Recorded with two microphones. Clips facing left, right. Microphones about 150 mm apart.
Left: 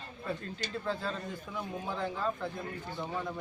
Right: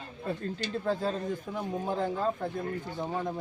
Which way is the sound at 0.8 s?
45° right (ahead or behind).